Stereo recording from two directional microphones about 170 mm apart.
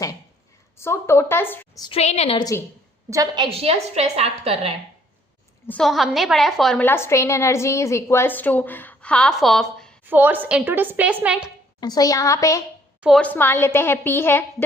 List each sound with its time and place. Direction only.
0.8 s a woman's voice: 15° left (ahead or behind)
1.8 s a woman's voice: 35° left (ahead or behind)
2.4 s a woman's voice: 20° left (ahead or behind)
3.1 s a woman's voice: 25° right (ahead or behind)
5.6 s a woman's voice: 5° left (ahead or behind)
6.8 s a woman's voice: 15° left (ahead or behind)
10.1 s a woman's voice: 10° right (ahead or behind)
11.8 s a woman's voice: 25° left (ahead or behind)
13.0 s a woman's voice: centre (ahead or behind)
13.2 s a woman's voice: 10° left (ahead or behind)